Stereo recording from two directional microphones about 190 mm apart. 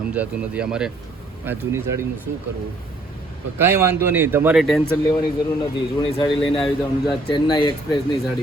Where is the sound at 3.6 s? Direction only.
10° right (ahead or behind).